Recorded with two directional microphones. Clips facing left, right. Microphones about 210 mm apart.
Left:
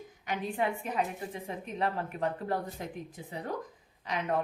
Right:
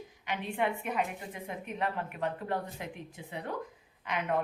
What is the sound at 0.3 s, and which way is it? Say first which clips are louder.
A woman's voice: left 1 dB; 35° left (ahead or behind).